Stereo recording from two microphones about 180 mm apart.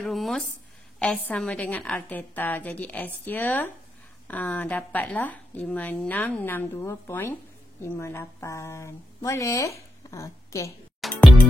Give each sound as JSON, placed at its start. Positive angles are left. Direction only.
{"t": 0.0, "sound": "a woman's voice", "side_deg": 0}
{"t": 11.0, "sound": "music", "side_deg": 0}